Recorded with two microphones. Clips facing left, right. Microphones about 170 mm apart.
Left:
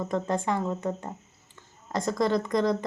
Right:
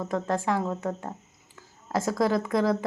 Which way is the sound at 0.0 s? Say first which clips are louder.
Even; centre (ahead or behind).